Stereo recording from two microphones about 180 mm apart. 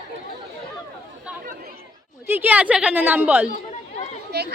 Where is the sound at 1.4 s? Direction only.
55° right (ahead or behind).